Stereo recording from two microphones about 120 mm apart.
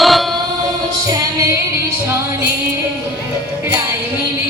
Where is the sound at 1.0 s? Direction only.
30° right (ahead or behind).